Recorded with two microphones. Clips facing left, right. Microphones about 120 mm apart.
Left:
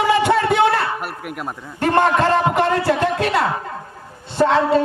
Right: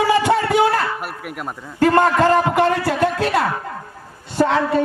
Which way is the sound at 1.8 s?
25° left (ahead or behind).